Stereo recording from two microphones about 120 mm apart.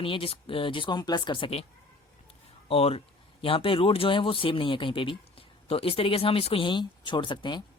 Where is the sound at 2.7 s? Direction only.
55° left (ahead or behind).